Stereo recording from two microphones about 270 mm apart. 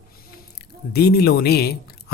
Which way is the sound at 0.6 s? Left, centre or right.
Left.